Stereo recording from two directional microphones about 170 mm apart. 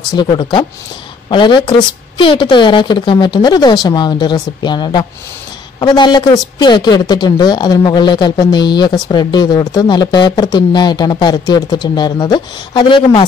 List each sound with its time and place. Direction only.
0.1 s speech: 25° left (ahead or behind)